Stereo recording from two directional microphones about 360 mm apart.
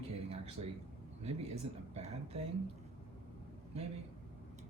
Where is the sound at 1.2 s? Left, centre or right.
Right.